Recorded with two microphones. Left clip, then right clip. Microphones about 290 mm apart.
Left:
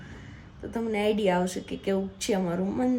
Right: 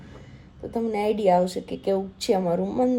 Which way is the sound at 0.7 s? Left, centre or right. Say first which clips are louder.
Right 2 dB; centre.